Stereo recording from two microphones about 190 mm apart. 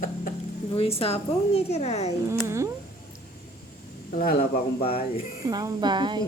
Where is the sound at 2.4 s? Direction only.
15° right (ahead or behind).